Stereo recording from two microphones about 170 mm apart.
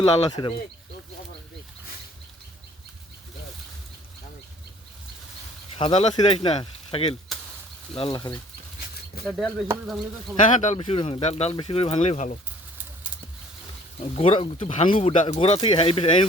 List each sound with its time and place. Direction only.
0.3 s speech: 25° left (ahead or behind)
5.7 s speech: 35° left (ahead or behind)
9.2 s speech: centre (ahead or behind)
10.6 s speech: 40° left (ahead or behind)
14.0 s speech: 35° left (ahead or behind)
14.7 s speech: 45° left (ahead or behind)